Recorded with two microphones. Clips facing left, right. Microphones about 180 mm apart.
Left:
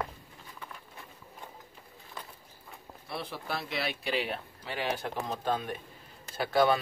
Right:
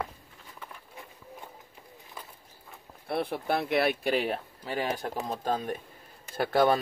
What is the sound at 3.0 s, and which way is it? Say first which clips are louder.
Speech: right 8 dB; 55° right (ahead or behind).